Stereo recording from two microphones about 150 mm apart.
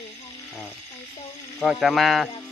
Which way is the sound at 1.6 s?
Centre (ahead or behind).